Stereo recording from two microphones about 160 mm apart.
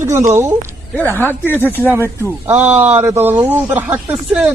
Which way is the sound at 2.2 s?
15° right (ahead or behind).